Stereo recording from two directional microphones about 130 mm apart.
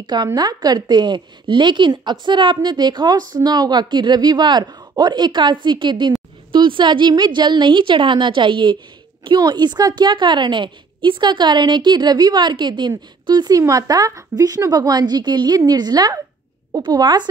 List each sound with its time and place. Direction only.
0.0 s a woman's voice: 35° right (ahead or behind)